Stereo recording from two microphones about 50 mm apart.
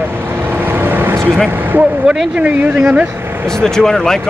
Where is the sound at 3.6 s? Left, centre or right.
Centre.